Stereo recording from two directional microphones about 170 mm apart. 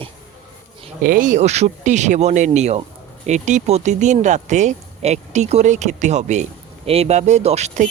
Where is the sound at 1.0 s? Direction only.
55° right (ahead or behind).